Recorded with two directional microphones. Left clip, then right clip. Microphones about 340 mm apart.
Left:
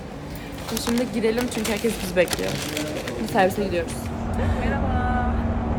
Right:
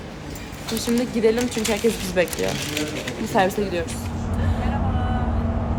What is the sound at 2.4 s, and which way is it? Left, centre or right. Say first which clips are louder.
Speech: right 2 dB; left.